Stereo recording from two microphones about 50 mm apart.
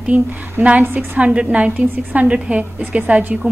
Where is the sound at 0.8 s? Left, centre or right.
Right.